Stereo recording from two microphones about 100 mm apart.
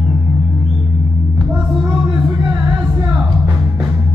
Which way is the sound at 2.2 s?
30° right (ahead or behind).